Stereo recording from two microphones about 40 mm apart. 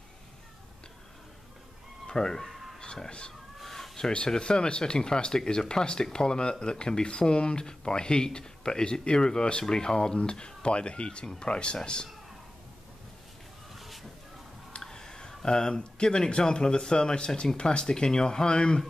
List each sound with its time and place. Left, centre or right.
2.0 s speech: centre
2.8 s speech: left
3.5 s chicken: centre
4.1 s speech: left
13.7 s a sound: centre
14.8 s speech: centre